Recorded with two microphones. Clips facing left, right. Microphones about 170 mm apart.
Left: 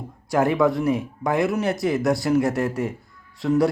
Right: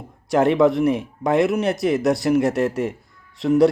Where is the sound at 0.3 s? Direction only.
25° right (ahead or behind).